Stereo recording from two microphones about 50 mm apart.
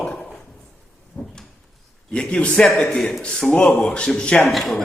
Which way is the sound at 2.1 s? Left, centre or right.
Left.